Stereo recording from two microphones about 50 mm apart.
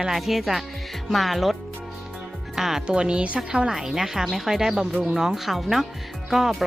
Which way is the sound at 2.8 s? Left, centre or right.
Right.